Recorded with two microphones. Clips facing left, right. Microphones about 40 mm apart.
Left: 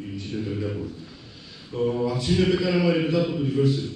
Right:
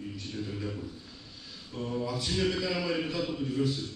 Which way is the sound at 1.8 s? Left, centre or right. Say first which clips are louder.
Left 9 dB; left.